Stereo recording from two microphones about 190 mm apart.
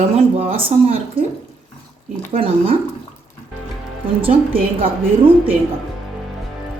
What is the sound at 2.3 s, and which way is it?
Speech, 30° right (ahead or behind).